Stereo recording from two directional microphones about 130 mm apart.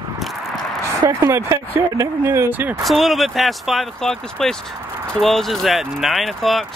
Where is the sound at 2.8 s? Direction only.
Centre (ahead or behind).